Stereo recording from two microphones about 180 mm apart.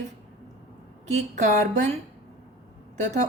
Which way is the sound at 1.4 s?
45° right (ahead or behind).